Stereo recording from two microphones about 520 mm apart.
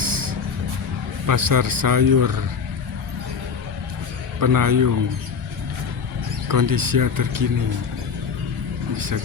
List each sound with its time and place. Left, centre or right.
0.0 s a sound: right
1.3 s speech: right
4.4 s speech: right
6.5 s speech: right